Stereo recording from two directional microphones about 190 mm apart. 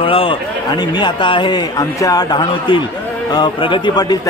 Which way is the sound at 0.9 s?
25° left (ahead or behind).